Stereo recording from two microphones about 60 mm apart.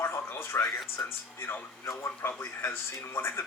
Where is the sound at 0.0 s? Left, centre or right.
Left.